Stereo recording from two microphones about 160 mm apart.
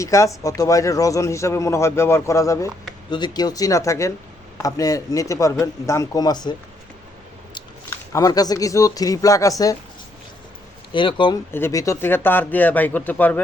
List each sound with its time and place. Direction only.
0.0 s speech: 20° left (ahead or behind)
10.9 s speech: 30° left (ahead or behind)
11.5 s speech: 20° left (ahead or behind)